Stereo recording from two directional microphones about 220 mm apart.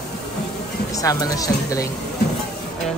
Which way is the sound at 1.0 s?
15° left (ahead or behind).